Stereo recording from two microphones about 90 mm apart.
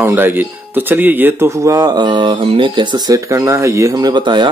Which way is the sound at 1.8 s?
55° right (ahead or behind).